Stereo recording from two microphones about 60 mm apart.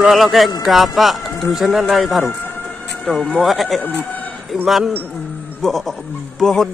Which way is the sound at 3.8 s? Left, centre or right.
Left.